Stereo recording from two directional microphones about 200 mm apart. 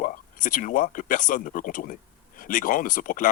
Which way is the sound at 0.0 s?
45° left (ahead or behind).